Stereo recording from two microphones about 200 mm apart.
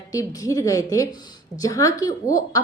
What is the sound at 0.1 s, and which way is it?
A woman's voice, 15° left (ahead or behind).